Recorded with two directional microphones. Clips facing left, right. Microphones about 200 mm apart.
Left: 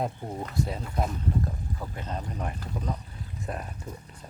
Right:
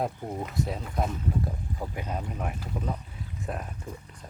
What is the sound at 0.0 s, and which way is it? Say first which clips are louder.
Speech: right 1 dB; 5° right (ahead or behind).